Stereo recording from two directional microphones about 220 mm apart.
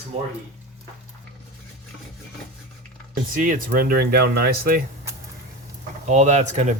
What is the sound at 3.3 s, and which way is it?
Speech, 40° right (ahead or behind).